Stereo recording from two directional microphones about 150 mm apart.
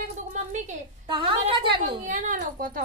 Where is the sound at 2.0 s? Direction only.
60° right (ahead or behind).